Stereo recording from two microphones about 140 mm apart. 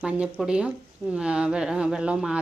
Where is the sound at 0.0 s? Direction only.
5° right (ahead or behind).